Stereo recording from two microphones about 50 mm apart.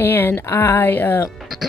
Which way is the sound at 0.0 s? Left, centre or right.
Left.